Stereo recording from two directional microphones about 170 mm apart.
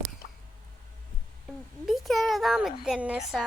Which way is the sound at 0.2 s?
50° left (ahead or behind).